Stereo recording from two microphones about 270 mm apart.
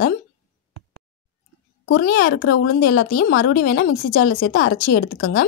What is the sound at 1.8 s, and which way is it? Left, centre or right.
Speech, left.